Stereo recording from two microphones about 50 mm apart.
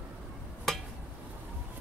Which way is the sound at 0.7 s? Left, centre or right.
Centre.